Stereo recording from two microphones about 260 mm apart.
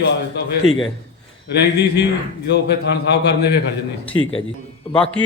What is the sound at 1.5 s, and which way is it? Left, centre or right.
A man's voice, left.